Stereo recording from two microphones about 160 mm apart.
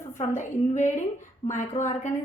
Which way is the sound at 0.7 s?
50° left (ahead or behind).